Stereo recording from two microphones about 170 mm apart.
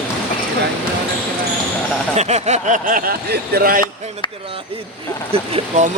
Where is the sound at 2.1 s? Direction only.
40° right (ahead or behind); by 3.8 s 60° right (ahead or behind).